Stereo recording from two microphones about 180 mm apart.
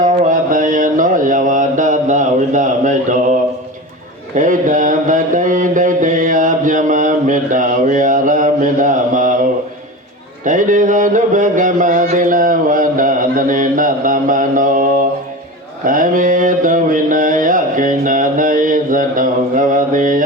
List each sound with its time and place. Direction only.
0.0 s mantra: 45° right (ahead or behind)
4.4 s mantra: 45° right (ahead or behind)
10.4 s a sound: 45° right (ahead or behind)
15.8 s mantra: 50° right (ahead or behind)